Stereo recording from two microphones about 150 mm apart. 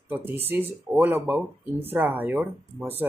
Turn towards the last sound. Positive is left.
turn(degrees=-15)  # may be behind; listen again after turning